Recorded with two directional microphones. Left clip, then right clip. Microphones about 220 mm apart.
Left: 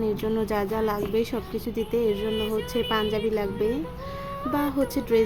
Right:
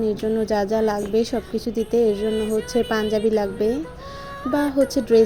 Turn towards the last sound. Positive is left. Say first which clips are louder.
# right 6 dB
turn(degrees=-10)  # may be behind; listen again after turning